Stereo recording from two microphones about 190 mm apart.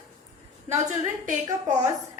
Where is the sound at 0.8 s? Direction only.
40° right (ahead or behind).